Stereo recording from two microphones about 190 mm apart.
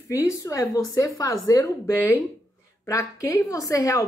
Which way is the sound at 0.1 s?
15° left (ahead or behind).